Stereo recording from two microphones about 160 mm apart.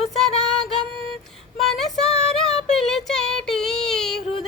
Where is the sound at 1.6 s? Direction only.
Centre (ahead or behind).